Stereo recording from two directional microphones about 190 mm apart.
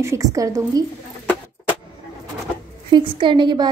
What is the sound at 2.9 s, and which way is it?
Speech, 25° right (ahead or behind).